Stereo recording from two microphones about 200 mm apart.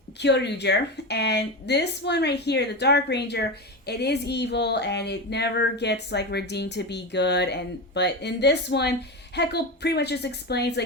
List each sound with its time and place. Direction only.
0.2 s speech: 60° left (ahead or behind)